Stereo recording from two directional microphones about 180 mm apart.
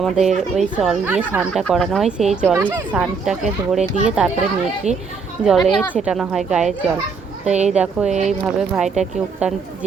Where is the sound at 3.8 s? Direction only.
40° right (ahead or behind).